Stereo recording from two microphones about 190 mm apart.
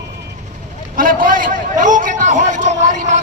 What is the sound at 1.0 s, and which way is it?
A man's voice, 50° right (ahead or behind).